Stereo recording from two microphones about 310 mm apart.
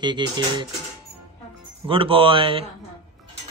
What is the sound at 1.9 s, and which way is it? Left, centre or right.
Speech, centre.